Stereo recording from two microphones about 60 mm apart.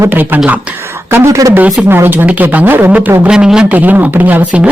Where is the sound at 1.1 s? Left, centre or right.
Right.